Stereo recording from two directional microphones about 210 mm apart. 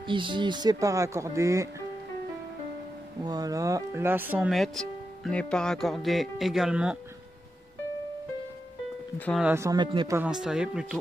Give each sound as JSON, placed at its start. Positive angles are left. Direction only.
{"t": 0.0, "sound": "speech", "side_deg": -25}
{"t": 3.3, "sound": "speech", "side_deg": -15}
{"t": 9.2, "sound": "speech", "side_deg": 0}
{"t": 9.5, "sound": "speech", "side_deg": -15}
{"t": 10.1, "sound": "speech", "side_deg": -5}